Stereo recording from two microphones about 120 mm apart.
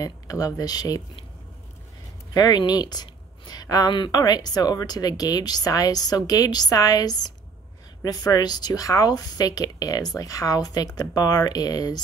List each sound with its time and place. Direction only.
0.0 s speech: 30° left (ahead or behind)
2.3 s speech: 35° left (ahead or behind)